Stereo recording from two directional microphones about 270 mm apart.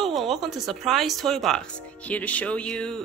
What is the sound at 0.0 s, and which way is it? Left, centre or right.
Speech, centre.